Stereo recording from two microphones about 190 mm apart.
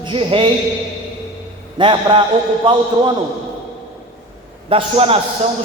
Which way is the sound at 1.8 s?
25° right (ahead or behind).